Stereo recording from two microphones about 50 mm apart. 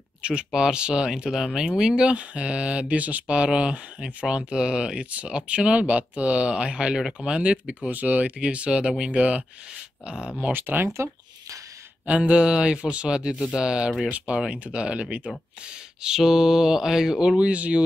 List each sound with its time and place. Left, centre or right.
0.2 s speech: centre
10.5 s speech: right
12.1 s speech: right
16.0 s speech: centre
17.4 s speech: right